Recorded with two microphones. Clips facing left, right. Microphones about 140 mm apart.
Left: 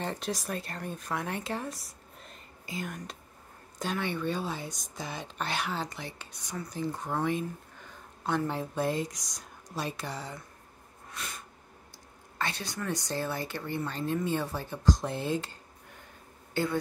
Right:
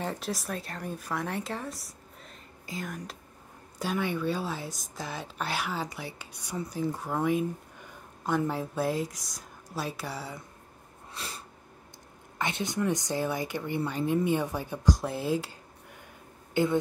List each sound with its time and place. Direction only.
0.0 s speech: 5° right (ahead or behind)
11.1 s a sound: 30° right (ahead or behind)
12.4 s speech: 20° right (ahead or behind)
16.6 s speech: 15° right (ahead or behind)